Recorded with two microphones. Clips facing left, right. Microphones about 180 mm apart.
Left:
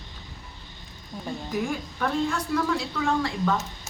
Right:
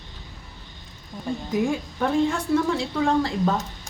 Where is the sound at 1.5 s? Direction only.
25° right (ahead or behind).